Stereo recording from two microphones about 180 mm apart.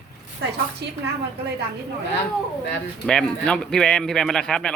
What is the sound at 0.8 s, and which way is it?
Speech, 70° right (ahead or behind).